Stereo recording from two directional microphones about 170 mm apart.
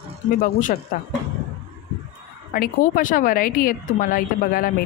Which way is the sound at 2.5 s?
55° left (ahead or behind).